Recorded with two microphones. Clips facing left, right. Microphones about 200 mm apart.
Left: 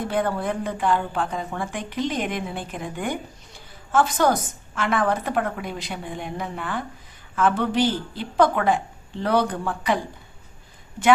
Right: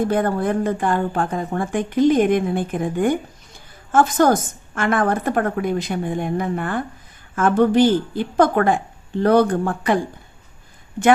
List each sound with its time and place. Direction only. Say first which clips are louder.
0.0 s a woman's voice: right 5 dB; 45° right (ahead or behind)